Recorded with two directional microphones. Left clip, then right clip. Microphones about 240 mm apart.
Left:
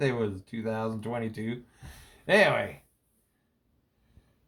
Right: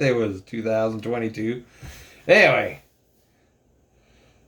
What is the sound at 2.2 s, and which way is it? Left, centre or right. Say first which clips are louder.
Speech: right 7 dB; left.